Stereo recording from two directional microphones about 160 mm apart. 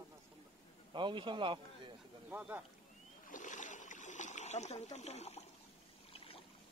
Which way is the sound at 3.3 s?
50° left (ahead or behind).